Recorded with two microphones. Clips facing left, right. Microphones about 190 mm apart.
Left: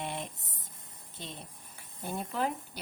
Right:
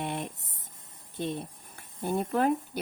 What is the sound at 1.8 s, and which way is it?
Speech, 55° right (ahead or behind).